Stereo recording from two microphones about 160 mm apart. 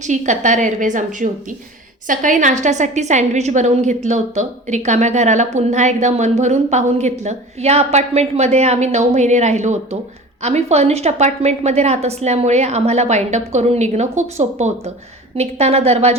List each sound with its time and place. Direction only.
0.0 s a woman's voice: 50° right (ahead or behind)